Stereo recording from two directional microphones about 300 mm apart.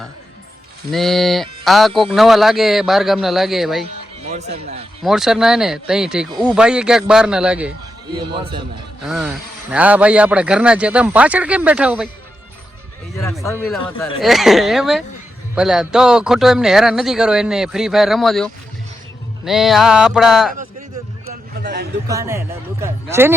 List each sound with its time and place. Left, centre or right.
0.9 s speech: centre
4.3 s speech: right
5.0 s speech: centre
8.3 s speech: centre
9.0 s speech: centre
13.1 s speech: centre
21.5 s a man's voice: right
22.0 s speech: centre